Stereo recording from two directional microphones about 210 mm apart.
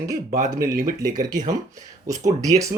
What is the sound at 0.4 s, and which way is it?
Speech, 15° right (ahead or behind).